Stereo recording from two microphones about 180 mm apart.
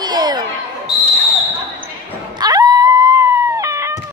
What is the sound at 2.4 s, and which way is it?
Cat, 20° right (ahead or behind).